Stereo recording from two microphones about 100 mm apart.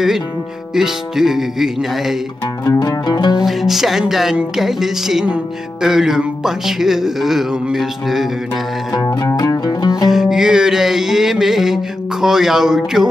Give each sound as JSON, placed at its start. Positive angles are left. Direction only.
{"t": 0.7, "sound": "music", "side_deg": -5}
{"t": 2.6, "sound": "music", "side_deg": 35}
{"t": 3.3, "sound": "music", "side_deg": -5}
{"t": 8.9, "sound": "music", "side_deg": 35}
{"t": 10.0, "sound": "music", "side_deg": -5}